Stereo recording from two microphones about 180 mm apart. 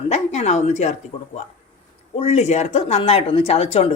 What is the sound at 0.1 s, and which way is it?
Speech, 40° left (ahead or behind).